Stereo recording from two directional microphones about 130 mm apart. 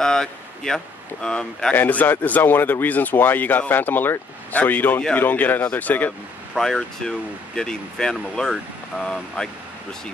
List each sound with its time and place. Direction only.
0.0 s speech: 5° left (ahead or behind)
6.5 s speech: centre (ahead or behind)